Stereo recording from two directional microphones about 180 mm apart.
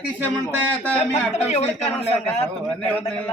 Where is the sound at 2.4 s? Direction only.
5° left (ahead or behind).